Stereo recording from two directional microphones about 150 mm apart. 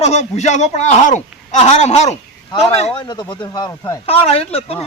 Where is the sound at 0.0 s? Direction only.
50° left (ahead or behind).